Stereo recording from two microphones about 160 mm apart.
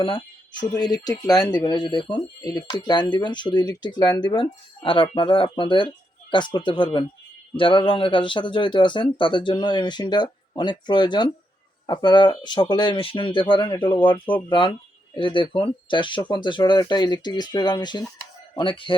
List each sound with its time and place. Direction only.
0.0 s speech: 30° left (ahead or behind)